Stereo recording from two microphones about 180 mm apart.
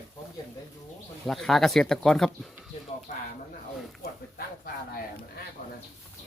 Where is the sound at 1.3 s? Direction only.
Centre (ahead or behind).